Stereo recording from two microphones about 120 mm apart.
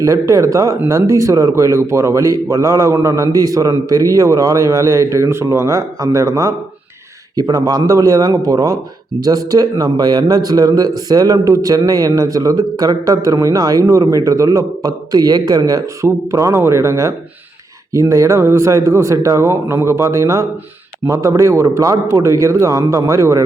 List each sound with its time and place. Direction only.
0.0 s a man's voice: 25° right (ahead or behind)